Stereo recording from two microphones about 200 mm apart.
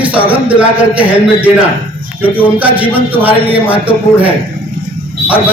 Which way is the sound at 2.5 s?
10° right (ahead or behind).